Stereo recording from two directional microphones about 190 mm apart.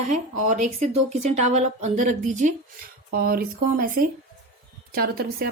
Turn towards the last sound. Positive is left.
turn(degrees=-50)  # may be behind; listen again after turning